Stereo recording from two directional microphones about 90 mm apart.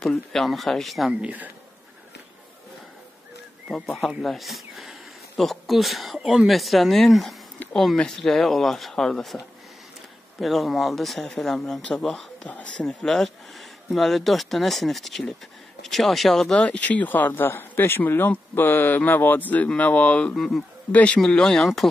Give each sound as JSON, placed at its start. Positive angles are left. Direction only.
{"t": 0.0, "sound": "speech", "side_deg": 5}
{"t": 1.2, "sound": "speech", "side_deg": -15}
{"t": 3.7, "sound": "speech", "side_deg": 0}
{"t": 10.4, "sound": "speech", "side_deg": 0}
{"t": 12.4, "sound": "speech", "side_deg": 15}
{"t": 20.3, "sound": "speech", "side_deg": 0}
{"t": 20.9, "sound": "speech", "side_deg": 15}